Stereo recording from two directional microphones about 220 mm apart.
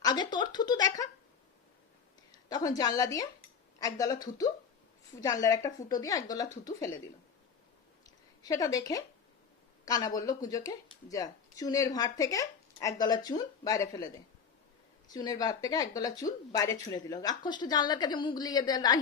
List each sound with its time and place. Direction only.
0.0 s speech: 20° left (ahead or behind)
2.5 s speech: 15° left (ahead or behind)
8.0 s a sound: 15° left (ahead or behind)
9.8 s speech: 15° left (ahead or behind)